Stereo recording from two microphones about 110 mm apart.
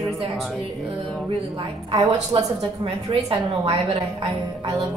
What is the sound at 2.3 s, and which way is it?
A woman's voice, 45° right (ahead or behind).